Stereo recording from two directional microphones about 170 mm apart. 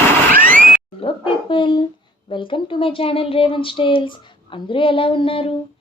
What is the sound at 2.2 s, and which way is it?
A woman's voice, 30° left (ahead or behind).